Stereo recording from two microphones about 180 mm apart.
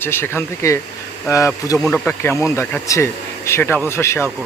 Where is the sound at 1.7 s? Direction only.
5° left (ahead or behind).